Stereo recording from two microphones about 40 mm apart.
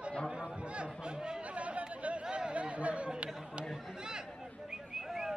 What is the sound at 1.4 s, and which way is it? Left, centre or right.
Chatter, right.